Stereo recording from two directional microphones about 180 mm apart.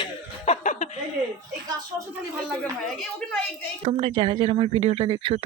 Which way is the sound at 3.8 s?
40° right (ahead or behind).